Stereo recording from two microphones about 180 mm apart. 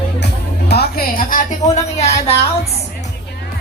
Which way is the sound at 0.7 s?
60° left (ahead or behind).